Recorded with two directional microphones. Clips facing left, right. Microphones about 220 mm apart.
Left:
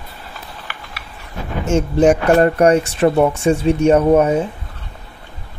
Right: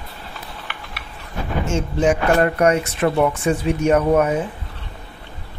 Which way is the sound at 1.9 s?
35° left (ahead or behind).